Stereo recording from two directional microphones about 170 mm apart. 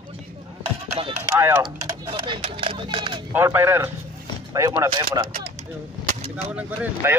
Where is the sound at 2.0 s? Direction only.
30° right (ahead or behind).